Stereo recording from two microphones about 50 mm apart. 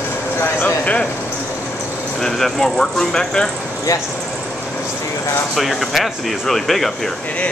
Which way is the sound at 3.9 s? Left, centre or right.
Left.